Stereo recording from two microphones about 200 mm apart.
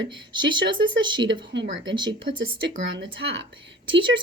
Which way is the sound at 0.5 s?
25° right (ahead or behind).